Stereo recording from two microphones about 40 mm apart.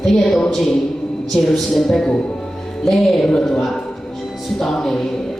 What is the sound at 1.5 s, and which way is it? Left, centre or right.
Speech, centre.